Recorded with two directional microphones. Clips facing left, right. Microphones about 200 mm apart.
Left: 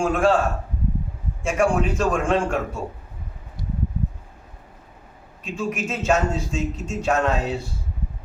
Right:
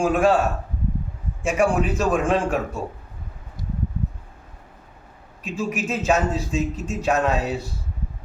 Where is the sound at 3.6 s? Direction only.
45° right (ahead or behind).